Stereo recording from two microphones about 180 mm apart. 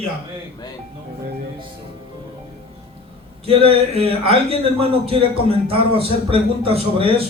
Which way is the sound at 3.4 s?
30° right (ahead or behind).